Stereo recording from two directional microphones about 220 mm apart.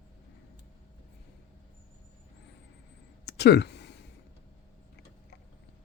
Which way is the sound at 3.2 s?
50° left (ahead or behind).